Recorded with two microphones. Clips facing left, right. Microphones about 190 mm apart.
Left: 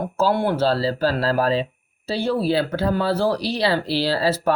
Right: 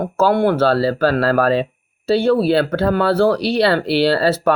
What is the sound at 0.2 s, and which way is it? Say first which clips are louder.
Speech: right 5 dB; 60° right (ahead or behind).